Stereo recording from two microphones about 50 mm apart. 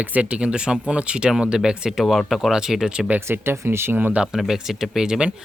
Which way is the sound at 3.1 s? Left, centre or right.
Right.